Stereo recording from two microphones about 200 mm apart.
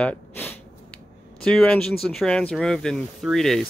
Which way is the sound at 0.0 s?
10° left (ahead or behind).